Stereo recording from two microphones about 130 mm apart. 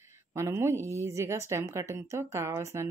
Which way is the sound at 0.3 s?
20° right (ahead or behind).